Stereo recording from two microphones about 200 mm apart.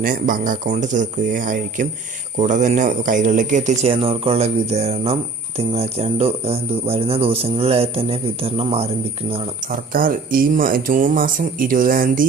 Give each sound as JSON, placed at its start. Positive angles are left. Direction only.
{"t": 0.0, "sound": "speech", "side_deg": -45}
{"t": 9.9, "sound": "speech", "side_deg": -45}